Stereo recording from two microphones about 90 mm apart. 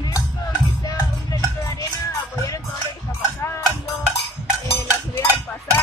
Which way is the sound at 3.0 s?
30° left (ahead or behind).